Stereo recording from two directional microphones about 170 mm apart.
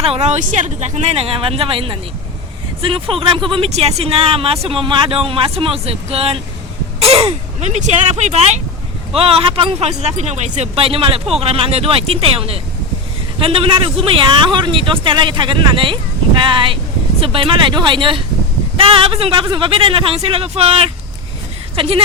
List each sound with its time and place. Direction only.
0.0 s speech: 40° right (ahead or behind)